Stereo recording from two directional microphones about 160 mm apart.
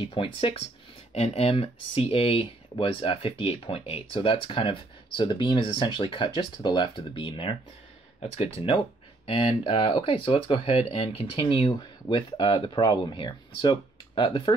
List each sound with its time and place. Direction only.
0.0 s speech: 35° left (ahead or behind)